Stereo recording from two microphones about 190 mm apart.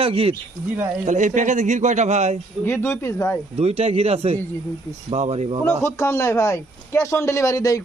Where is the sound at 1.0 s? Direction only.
40° right (ahead or behind).